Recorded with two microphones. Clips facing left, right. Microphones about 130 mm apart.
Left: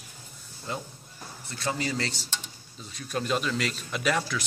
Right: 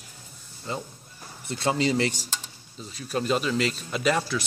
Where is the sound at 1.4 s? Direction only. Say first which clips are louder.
Right 6 dB; 20° right (ahead or behind).